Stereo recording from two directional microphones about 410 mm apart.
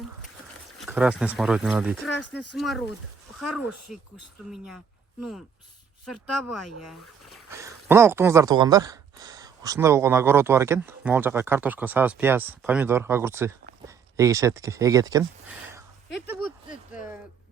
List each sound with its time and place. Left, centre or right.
0.8 s speech: centre
2.0 s speech: left
2.6 s speech: centre
3.7 s speech: left
4.5 s speech: centre
6.3 s speech: left
7.5 s speech: centre
16.0 s a sound: left